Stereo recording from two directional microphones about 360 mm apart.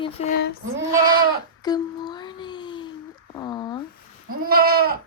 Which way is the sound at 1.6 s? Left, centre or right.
Centre.